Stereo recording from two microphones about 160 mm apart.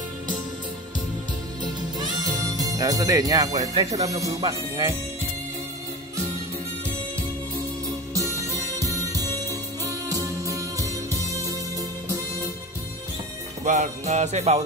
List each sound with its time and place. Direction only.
1.6 s speech: 25° right (ahead or behind)
8.1 s music: 20° right (ahead or behind)
13.7 s music: 50° right (ahead or behind)